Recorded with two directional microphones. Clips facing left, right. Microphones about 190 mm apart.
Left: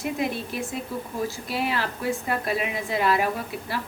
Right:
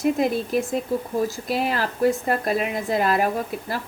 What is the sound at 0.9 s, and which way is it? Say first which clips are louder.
A woman's voice: right 7 dB; 40° right (ahead or behind).